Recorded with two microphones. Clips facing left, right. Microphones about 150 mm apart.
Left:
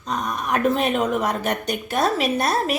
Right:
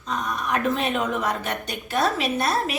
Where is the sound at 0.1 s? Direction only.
45° left (ahead or behind).